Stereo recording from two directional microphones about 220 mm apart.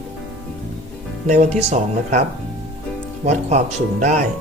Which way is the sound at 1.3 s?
30° right (ahead or behind).